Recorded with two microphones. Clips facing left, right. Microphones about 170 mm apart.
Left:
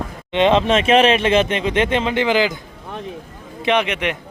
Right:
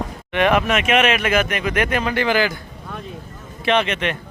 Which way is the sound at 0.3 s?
25° left (ahead or behind).